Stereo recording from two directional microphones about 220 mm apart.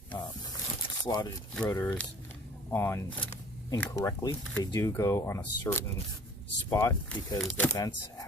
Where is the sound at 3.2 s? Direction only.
25° left (ahead or behind).